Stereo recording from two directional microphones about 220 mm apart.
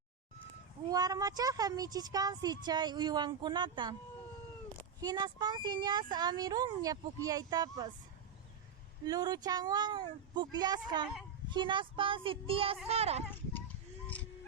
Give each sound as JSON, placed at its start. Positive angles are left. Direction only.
{"t": 0.9, "sound": "speech", "side_deg": -15}
{"t": 4.9, "sound": "speech", "side_deg": -15}
{"t": 9.0, "sound": "speech", "side_deg": -15}